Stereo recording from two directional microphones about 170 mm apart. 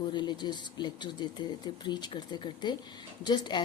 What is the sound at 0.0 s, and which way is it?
Speech, 25° left (ahead or behind).